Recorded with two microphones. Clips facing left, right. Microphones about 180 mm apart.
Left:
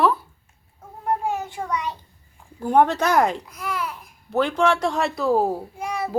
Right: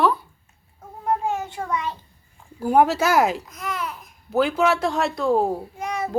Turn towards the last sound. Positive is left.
turn(degrees=10)  # may be behind; listen again after turning